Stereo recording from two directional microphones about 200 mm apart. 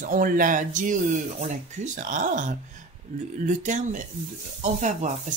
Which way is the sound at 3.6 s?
40° right (ahead or behind).